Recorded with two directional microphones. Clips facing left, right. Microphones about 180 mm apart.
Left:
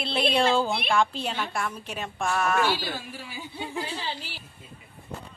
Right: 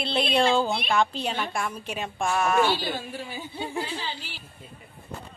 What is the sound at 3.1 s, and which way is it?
Speech, 50° right (ahead or behind).